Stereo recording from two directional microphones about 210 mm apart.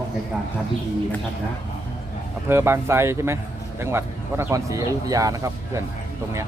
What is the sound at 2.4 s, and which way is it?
Speech, 10° right (ahead or behind).